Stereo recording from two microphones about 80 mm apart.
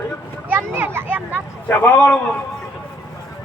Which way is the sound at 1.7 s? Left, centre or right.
Left.